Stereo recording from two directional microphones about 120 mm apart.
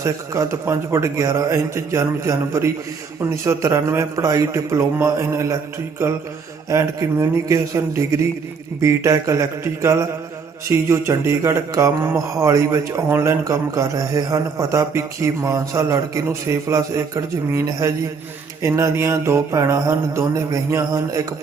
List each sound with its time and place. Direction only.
0.0 s a man's voice: 25° right (ahead or behind)
6.7 s a man's voice: 25° right (ahead or behind)